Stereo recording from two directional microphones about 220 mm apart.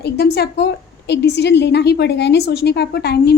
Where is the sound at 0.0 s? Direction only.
50° left (ahead or behind).